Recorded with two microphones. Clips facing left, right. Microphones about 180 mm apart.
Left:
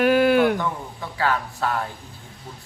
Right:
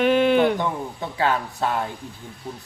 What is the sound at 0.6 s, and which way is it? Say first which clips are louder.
A man's voice: right 2 dB; 20° right (ahead or behind).